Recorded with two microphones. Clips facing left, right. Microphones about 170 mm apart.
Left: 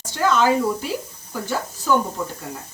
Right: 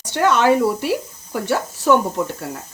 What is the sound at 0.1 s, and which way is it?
Speech, 65° right (ahead or behind).